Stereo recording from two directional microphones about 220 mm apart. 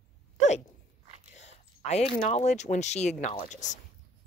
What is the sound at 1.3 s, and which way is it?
Speech, 30° left (ahead or behind).